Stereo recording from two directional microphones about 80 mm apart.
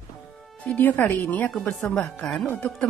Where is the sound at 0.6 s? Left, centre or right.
Centre.